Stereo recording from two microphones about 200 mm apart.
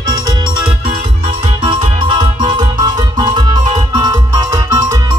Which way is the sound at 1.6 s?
25° right (ahead or behind).